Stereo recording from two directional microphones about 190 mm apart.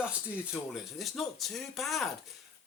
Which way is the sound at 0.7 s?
Centre (ahead or behind).